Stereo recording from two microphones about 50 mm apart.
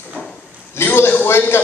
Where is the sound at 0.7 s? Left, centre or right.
Left.